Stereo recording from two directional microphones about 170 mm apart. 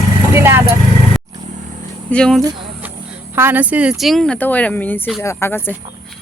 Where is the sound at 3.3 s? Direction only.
10° right (ahead or behind); by 5.7 s 15° left (ahead or behind).